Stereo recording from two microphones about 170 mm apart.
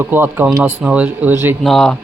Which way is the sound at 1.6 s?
5° left (ahead or behind).